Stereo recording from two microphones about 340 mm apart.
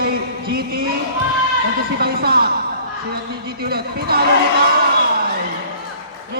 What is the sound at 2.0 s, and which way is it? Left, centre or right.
Speech, right.